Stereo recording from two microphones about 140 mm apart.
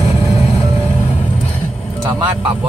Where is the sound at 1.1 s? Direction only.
10° left (ahead or behind).